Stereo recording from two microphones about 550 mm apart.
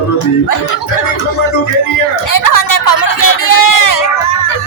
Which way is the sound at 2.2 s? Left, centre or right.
Left.